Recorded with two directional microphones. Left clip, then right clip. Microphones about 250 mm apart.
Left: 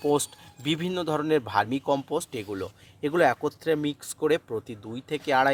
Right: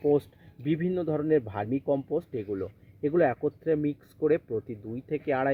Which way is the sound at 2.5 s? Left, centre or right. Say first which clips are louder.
Even; centre.